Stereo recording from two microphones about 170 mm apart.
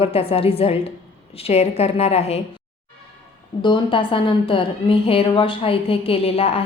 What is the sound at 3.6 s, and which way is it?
A woman's voice, 30° left (ahead or behind).